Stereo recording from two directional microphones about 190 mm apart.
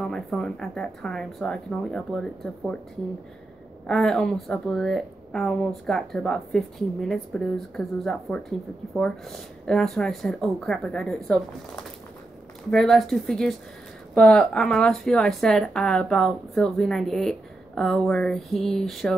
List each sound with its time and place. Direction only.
0.0 s speech: centre (ahead or behind)
3.8 s speech: centre (ahead or behind)